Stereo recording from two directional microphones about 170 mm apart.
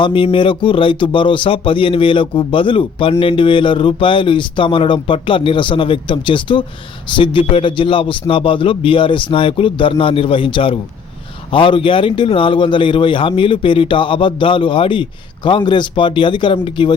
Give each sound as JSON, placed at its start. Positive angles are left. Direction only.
{"t": 0.0, "sound": "speech", "side_deg": 30}